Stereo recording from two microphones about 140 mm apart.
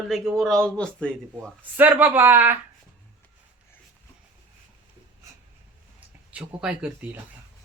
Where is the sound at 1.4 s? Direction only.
10° right (ahead or behind).